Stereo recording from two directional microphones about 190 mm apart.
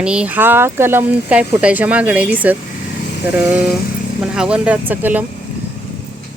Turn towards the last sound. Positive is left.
turn(degrees=-10)  # may be behind; listen again after turning